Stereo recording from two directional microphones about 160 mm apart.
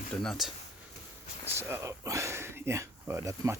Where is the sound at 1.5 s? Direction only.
15° right (ahead or behind).